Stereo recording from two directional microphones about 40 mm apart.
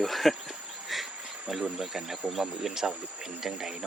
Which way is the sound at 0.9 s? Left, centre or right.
Centre.